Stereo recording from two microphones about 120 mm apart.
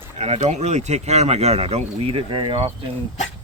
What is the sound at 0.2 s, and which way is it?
Speech, 70° right (ahead or behind).